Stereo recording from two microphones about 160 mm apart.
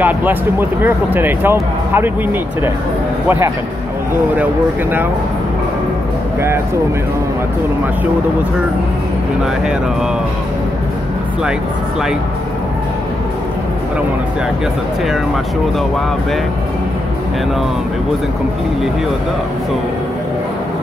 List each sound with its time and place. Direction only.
0.0 s speech: 10° right (ahead or behind)